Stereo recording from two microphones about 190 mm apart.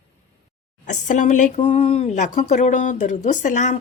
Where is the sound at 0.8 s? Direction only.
40° left (ahead or behind).